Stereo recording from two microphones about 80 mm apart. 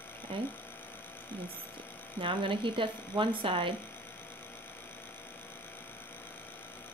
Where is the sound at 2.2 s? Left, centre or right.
Right.